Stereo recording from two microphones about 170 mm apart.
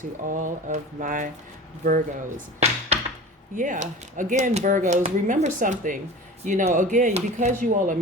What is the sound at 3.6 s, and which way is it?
Speech, 50° right (ahead or behind).